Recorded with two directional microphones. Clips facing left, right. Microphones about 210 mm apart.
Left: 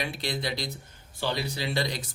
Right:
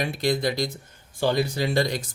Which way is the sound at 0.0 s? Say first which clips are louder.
Right 8 dB; 45° right (ahead or behind).